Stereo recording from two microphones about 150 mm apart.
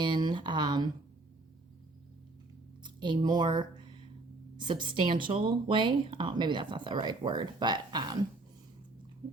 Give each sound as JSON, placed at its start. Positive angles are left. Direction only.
{"t": 0.0, "sound": "speech", "side_deg": -30}
{"t": 2.8, "sound": "speech", "side_deg": -30}